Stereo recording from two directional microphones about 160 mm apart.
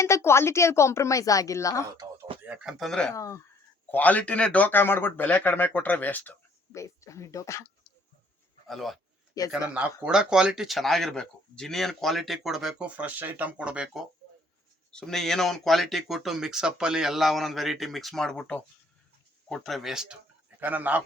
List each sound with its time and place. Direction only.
0.0 s speech: 15° left (ahead or behind)
2.0 s a sound: 35° right (ahead or behind)
2.4 s speech: 5° right (ahead or behind)
3.1 s speech: 20° left (ahead or behind)
8.6 s a man's voice: centre (ahead or behind)